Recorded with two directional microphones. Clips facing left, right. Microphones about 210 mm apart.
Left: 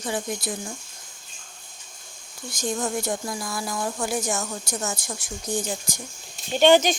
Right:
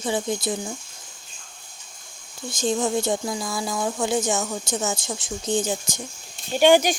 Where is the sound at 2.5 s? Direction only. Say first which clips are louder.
Right 4 dB; 25° right (ahead or behind).